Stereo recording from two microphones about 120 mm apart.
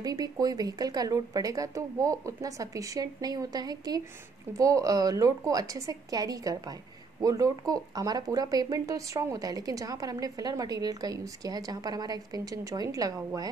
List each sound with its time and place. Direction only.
0.0 s a woman's voice: 30° right (ahead or behind)